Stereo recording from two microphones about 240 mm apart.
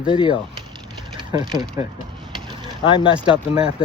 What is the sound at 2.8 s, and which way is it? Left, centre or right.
Speech, left.